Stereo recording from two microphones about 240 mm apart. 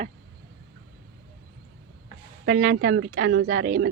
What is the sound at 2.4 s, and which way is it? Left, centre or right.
Speech, right.